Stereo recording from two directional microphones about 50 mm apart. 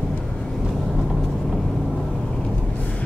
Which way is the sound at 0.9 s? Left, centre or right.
Centre.